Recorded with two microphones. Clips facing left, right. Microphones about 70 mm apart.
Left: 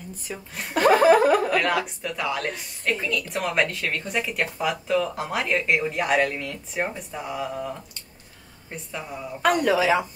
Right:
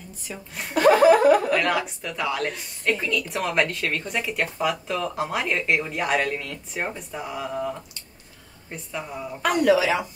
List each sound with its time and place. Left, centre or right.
0.7 s chuckle: left
1.5 s a woman's voice: centre
9.4 s a man's voice: left